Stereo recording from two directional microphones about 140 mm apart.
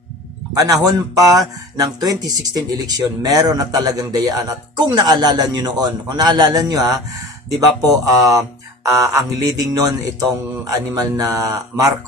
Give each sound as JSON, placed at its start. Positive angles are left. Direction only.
{"t": 0.5, "sound": "speech", "side_deg": -25}